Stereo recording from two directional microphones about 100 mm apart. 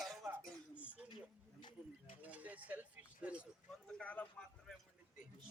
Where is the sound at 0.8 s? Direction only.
15° right (ahead or behind).